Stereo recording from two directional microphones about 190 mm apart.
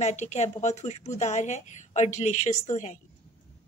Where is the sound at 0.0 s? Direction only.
35° left (ahead or behind).